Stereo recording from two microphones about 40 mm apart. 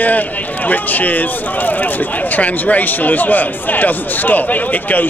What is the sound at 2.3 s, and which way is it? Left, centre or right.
A man's voice, left.